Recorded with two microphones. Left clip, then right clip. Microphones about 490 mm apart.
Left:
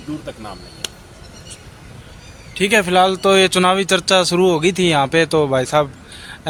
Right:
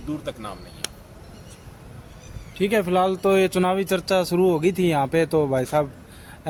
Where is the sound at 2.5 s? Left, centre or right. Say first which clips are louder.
Left 6 dB; right.